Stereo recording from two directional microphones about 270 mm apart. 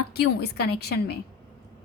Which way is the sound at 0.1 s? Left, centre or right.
Left.